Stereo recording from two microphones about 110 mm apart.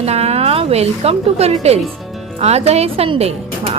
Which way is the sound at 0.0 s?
70° right (ahead or behind).